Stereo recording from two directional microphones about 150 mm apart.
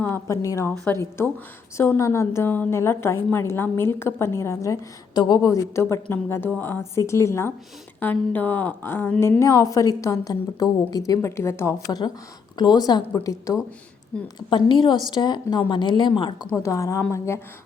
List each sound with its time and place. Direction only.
0.0 s a woman's voice: 20° left (ahead or behind)
9.4 s a woman's voice: 20° left (ahead or behind)
16.6 s a woman's voice: 20° left (ahead or behind)